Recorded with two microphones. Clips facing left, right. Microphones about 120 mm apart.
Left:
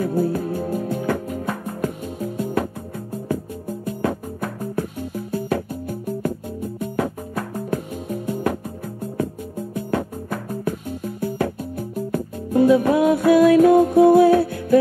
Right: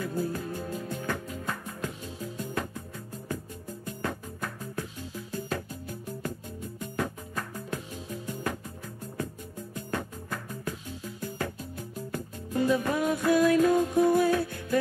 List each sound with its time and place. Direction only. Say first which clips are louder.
0.0 s music: left 10 dB; 55° left (ahead or behind)